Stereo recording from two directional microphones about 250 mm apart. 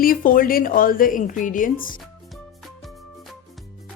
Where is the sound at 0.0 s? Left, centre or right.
Left.